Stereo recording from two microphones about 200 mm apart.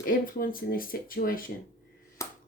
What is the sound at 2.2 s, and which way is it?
Finger snapping, 15° left (ahead or behind).